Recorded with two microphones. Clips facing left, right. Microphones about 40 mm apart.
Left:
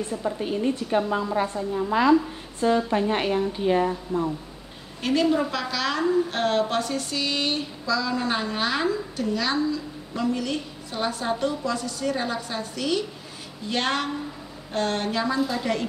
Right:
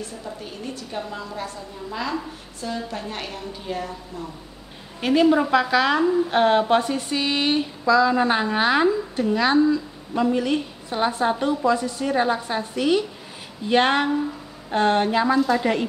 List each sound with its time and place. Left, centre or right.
0.4 s a woman's voice: left
5.0 s a woman's voice: centre